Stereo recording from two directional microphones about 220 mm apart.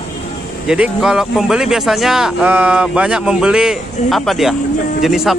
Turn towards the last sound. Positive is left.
turn(degrees=0)  # may be behind; listen again after turning